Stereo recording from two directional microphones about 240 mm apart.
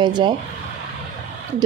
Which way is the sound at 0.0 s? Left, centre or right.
Centre.